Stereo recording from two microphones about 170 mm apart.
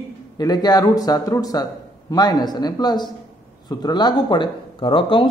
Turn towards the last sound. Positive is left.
turn(degrees=30)  # may be behind; listen again after turning